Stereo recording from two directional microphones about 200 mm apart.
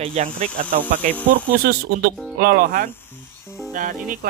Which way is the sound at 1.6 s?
50° right (ahead or behind).